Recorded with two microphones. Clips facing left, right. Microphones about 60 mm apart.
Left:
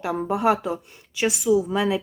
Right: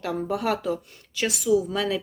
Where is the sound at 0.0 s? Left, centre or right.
Left.